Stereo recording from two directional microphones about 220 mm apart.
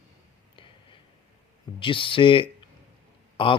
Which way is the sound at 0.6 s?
20° left (ahead or behind).